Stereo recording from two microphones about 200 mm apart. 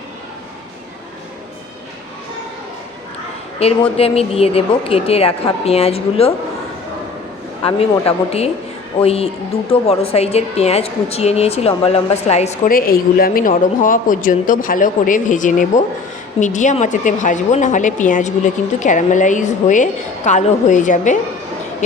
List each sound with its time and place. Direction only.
3.6 s speech: 30° left (ahead or behind)
7.6 s a woman's voice: 30° left (ahead or behind)